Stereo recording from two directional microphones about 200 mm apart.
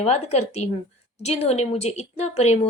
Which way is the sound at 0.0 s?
35° left (ahead or behind).